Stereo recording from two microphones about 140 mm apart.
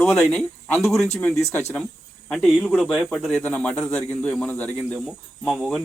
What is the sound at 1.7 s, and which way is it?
A man's voice, 10° left (ahead or behind).